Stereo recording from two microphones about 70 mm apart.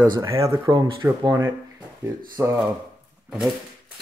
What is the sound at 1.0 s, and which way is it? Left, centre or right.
Speech, right.